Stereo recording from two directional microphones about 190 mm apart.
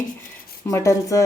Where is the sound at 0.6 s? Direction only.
15° left (ahead or behind).